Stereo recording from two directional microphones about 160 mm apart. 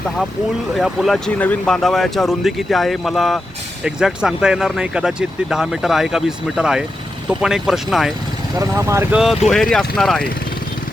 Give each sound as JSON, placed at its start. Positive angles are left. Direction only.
{"t": 0.8, "sound": "speech", "side_deg": 0}
{"t": 8.5, "sound": "speech", "side_deg": -20}
{"t": 9.1, "sound": "speech", "side_deg": 0}